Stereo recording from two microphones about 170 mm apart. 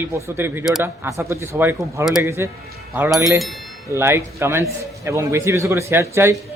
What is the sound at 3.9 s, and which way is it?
A man's voice, 15° right (ahead or behind).